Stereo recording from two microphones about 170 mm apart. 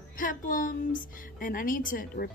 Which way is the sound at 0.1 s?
55° left (ahead or behind).